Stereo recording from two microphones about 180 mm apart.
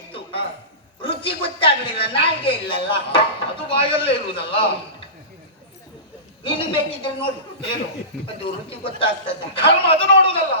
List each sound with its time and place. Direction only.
0.1 s music: 30° left (ahead or behind)
1.0 s a woman's voice: 30° left (ahead or behind)
6.4 s a woman's voice: 30° left (ahead or behind)
8.1 s speech: 5° left (ahead or behind)
8.8 s a man's voice: 30° left (ahead or behind)